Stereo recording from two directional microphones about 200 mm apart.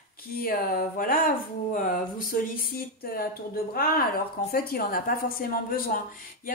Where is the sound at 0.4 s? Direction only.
50° left (ahead or behind).